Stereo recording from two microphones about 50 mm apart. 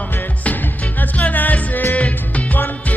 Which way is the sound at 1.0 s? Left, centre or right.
Left.